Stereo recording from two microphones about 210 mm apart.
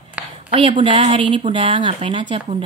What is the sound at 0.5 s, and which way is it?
Speech, 25° right (ahead or behind).